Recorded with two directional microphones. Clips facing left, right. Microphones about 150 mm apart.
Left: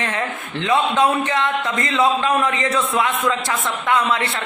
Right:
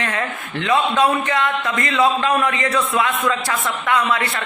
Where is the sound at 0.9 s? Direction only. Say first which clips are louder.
Even; 25° left (ahead or behind).